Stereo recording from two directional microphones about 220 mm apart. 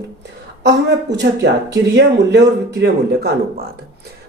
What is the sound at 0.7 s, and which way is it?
Speech, 50° right (ahead or behind).